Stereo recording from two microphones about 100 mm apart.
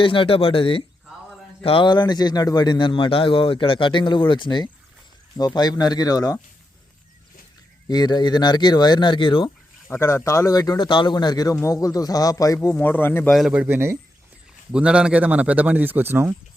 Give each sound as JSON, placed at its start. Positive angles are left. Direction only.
{"t": 0.0, "sound": "a man's voice", "side_deg": 60}
{"t": 7.9, "sound": "a man's voice", "side_deg": 45}
{"t": 9.9, "sound": "speech", "side_deg": 25}
{"t": 12.7, "sound": "a man's voice", "side_deg": 20}
{"t": 13.5, "sound": "speech", "side_deg": -15}
{"t": 14.7, "sound": "speech", "side_deg": -10}